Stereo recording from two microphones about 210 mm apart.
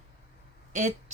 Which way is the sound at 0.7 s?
35° right (ahead or behind).